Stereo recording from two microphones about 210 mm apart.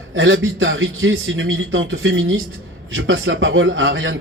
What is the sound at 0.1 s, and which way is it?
A man's voice, 70° right (ahead or behind).